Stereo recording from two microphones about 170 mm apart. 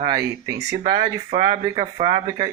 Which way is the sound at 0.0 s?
20° right (ahead or behind).